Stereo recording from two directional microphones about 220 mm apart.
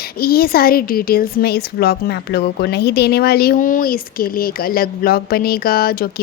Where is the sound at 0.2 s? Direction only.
45° left (ahead or behind).